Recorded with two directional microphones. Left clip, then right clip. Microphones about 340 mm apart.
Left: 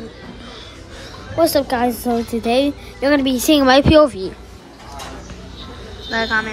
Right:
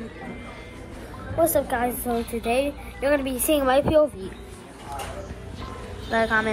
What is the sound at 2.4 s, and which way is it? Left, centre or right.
Speech, left.